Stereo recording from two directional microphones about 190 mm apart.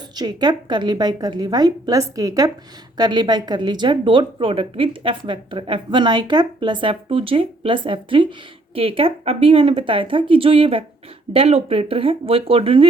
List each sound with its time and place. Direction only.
0.2 s a woman's voice: 20° right (ahead or behind)